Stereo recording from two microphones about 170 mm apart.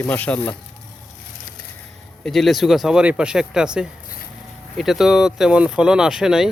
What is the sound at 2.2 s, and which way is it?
Speech, centre (ahead or behind).